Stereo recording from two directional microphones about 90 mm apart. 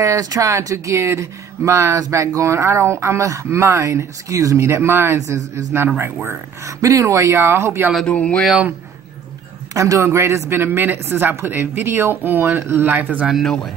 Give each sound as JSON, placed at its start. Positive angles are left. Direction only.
{"t": 0.0, "sound": "speech", "side_deg": -40}
{"t": 8.1, "sound": "speech", "side_deg": 15}
{"t": 9.8, "sound": "speech", "side_deg": -35}
{"t": 13.3, "sound": "speech", "side_deg": 5}